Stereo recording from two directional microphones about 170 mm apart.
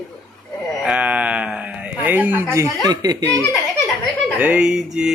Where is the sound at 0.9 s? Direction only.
5° right (ahead or behind).